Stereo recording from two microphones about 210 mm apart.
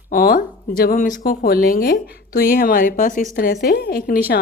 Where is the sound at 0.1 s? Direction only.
40° left (ahead or behind).